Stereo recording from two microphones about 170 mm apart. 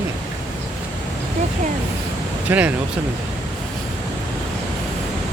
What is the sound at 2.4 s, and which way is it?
Speech, 10° right (ahead or behind).